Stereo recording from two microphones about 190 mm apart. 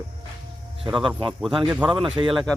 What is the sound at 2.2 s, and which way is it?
Speech, 25° right (ahead or behind).